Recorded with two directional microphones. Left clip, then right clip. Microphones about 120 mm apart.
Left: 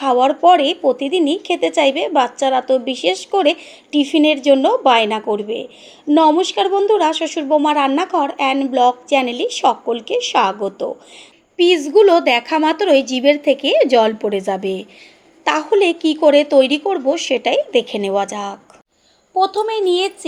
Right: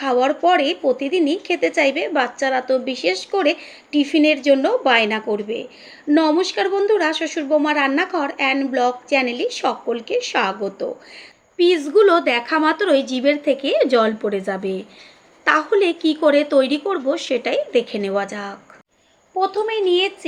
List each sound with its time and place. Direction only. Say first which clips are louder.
0.0 s a woman's voice: left 4 dB; 30° left (ahead or behind)
10.3 s speech: left 5 dB; 40° left (ahead or behind)
11.5 s a woman's voice: left 3 dB; 25° left (ahead or behind)